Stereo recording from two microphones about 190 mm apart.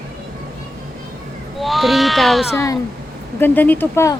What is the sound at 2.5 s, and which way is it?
A woman's voice, 15° left (ahead or behind).